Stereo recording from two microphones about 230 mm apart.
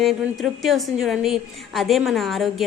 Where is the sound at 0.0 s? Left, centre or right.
Centre.